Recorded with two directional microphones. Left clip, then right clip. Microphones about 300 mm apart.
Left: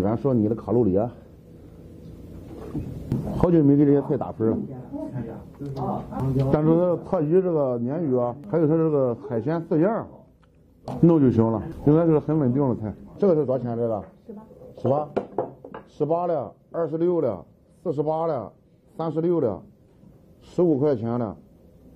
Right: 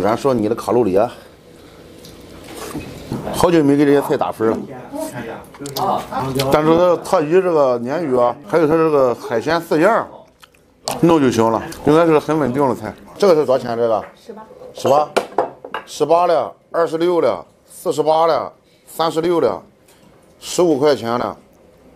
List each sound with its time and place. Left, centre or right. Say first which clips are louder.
0.0 s speech: right 7 dB; centre
2.4 s vehicle: right 7 dB; centre
3.3 s speech: right 6 dB; centre
15.1 s a sound: right 10 dB; centre
16.4 s speech: right 10 dB; centre
17.4 s a sound: right 9 dB; right
18.0 s speech: right 12 dB; centre
20.8 s speech: right 8 dB; centre